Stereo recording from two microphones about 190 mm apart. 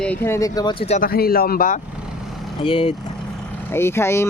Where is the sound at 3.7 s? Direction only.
15° left (ahead or behind).